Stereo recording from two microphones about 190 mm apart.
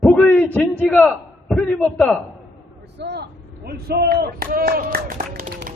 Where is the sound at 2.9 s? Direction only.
60° right (ahead or behind).